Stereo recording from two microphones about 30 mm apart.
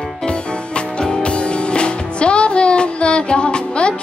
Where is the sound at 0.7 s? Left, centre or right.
Left.